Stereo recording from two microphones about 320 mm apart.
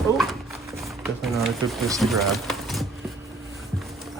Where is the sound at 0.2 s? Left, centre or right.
Centre.